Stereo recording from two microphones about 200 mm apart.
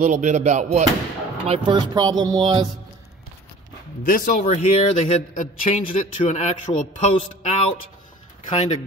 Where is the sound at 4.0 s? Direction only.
40° left (ahead or behind).